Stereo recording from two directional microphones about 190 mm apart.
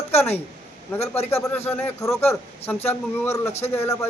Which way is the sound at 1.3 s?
10° left (ahead or behind).